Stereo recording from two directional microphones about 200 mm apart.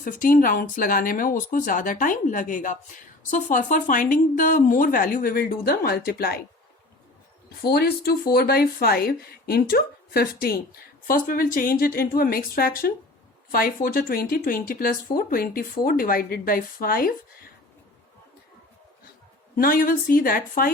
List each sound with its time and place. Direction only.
0.0 s speech: 45° left (ahead or behind)
7.6 s speech: 50° left (ahead or behind)
19.5 s speech: 45° left (ahead or behind)